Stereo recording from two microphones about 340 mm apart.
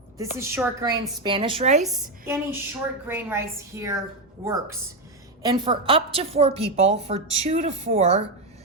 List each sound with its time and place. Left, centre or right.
0.2 s a woman's voice: centre
1.8 s a woman's voice: centre